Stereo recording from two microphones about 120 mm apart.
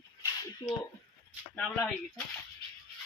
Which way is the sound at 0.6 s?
35° left (ahead or behind).